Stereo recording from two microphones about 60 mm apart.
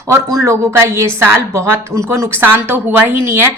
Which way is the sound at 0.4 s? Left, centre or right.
Right.